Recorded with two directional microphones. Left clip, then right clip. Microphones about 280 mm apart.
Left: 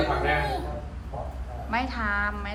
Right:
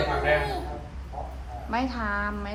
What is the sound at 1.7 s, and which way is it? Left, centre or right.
Speech, centre.